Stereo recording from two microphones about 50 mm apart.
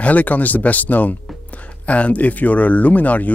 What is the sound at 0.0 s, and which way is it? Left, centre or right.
Speech, left.